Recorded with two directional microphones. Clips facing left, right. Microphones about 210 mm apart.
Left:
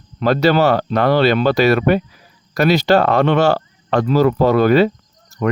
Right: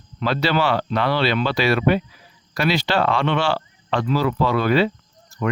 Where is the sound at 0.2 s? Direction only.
45° left (ahead or behind).